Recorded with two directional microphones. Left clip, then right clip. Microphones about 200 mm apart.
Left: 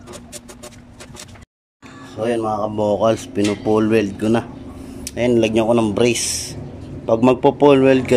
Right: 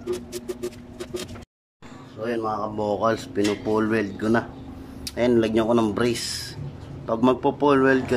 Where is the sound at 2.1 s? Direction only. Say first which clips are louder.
Left 6 dB; 15° left (ahead or behind).